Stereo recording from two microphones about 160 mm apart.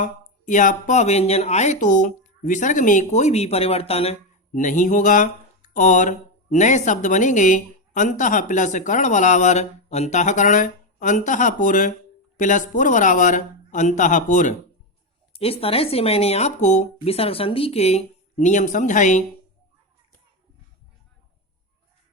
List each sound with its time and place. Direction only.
0.0 s speech: 50° left (ahead or behind)
15.3 s speech: 35° left (ahead or behind)